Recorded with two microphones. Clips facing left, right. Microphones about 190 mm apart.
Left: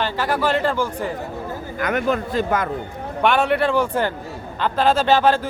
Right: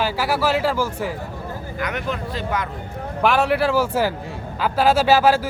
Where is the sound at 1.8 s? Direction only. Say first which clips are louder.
Left 6 dB; 50° left (ahead or behind).